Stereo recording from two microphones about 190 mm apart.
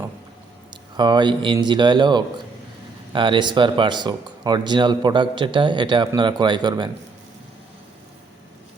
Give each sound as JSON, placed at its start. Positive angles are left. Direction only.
{"t": 0.9, "sound": "speech", "side_deg": -25}